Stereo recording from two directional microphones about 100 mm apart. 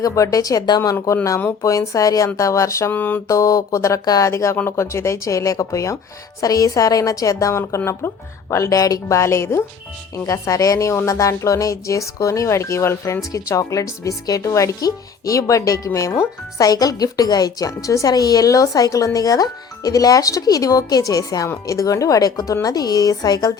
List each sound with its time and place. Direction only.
0.0 s speech: 35° left (ahead or behind)
2.9 s mantra: 15° left (ahead or behind)
3.2 s speech: 35° left (ahead or behind)